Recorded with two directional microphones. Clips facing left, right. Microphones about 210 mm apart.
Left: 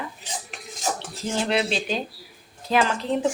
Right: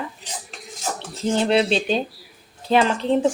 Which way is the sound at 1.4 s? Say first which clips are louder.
Right 5 dB; 30° right (ahead or behind).